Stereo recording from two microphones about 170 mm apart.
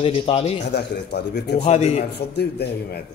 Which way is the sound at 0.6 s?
90° left.